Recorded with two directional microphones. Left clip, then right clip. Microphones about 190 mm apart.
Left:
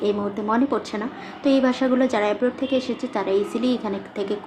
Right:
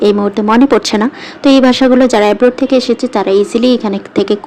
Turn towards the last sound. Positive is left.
turn(degrees=-40)  # may be behind; listen again after turning